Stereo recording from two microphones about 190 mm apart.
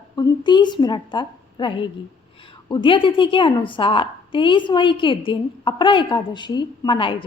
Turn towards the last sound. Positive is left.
turn(degrees=25)  # may be behind; listen again after turning